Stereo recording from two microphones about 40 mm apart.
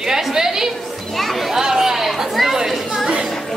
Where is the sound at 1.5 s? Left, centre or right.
Centre.